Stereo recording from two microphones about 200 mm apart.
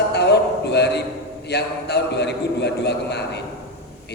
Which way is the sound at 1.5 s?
55° left (ahead or behind).